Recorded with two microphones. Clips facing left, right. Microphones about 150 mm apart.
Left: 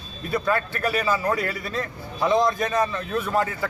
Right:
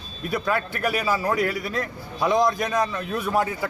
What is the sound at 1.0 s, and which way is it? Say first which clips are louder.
Speech: left 1 dB; 5° right (ahead or behind).